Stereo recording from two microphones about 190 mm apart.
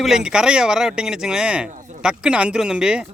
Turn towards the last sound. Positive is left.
turn(degrees=-5)  # may be behind; listen again after turning